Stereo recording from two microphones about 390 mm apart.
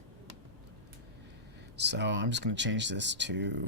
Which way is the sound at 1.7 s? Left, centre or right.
Right.